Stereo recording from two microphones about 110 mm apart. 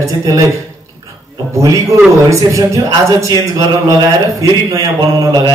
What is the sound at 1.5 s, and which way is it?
A man's voice, 30° right (ahead or behind).